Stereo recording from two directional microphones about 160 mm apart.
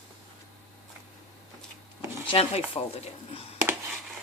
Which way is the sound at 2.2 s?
40° left (ahead or behind).